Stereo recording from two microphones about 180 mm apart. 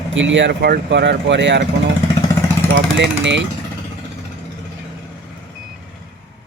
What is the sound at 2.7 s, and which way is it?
Speech, 80° right.